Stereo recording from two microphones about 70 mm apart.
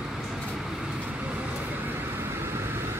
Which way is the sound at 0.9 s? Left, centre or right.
Right.